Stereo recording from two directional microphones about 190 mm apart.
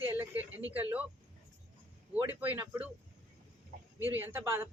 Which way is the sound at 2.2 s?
10° right (ahead or behind).